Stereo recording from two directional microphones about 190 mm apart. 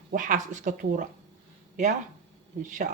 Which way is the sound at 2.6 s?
40° right (ahead or behind).